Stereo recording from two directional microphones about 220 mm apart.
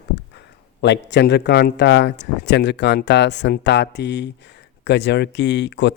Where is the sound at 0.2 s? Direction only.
50° left (ahead or behind).